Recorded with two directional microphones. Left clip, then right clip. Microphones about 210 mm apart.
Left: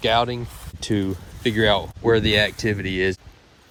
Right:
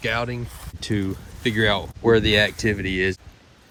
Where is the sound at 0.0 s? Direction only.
10° left (ahead or behind).